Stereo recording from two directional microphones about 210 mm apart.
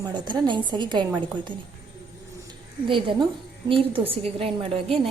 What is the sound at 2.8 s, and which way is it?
A woman's voice, 25° right (ahead or behind).